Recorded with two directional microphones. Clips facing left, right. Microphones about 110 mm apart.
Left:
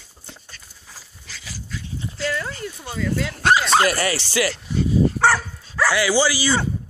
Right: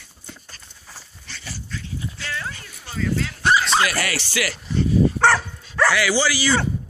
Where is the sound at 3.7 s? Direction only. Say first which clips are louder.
Left 3 dB; 40° left (ahead or behind).